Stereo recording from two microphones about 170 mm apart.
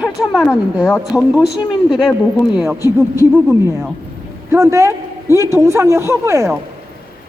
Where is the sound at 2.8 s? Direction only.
15° right (ahead or behind).